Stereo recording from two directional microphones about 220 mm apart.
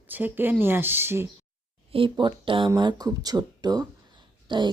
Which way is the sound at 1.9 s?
25° right (ahead or behind).